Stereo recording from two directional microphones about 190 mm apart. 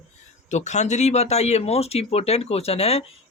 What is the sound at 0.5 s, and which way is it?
Speech, 40° left (ahead or behind).